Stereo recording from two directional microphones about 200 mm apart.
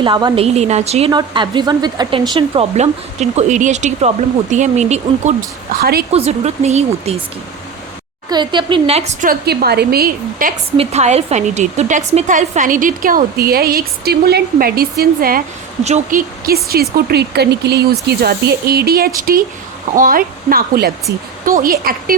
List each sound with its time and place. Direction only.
0.0 s a woman's voice: 20° right (ahead or behind)
5.8 s a woman's voice: 50° right (ahead or behind)
6.1 s a woman's voice: 30° right (ahead or behind)
8.3 s a woman's voice: 20° right (ahead or behind); by 10.5 s 45° right (ahead or behind)
10.8 s a woman's voice: 35° right (ahead or behind)